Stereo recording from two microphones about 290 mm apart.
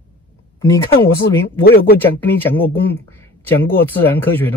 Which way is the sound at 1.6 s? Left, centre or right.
Left.